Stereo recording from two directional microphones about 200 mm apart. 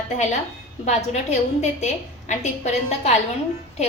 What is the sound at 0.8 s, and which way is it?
A woman's voice, 35° left (ahead or behind).